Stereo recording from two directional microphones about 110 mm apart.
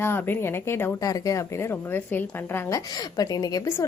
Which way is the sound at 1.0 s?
30° left (ahead or behind).